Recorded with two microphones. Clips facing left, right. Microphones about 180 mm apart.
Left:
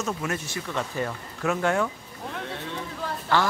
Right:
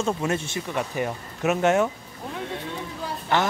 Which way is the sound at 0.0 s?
25° right (ahead or behind).